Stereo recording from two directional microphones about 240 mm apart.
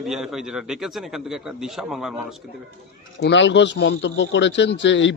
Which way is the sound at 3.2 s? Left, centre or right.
Left.